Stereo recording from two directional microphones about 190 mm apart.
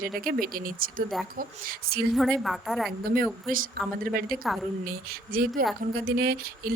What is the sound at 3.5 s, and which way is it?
Speech, 45° right (ahead or behind).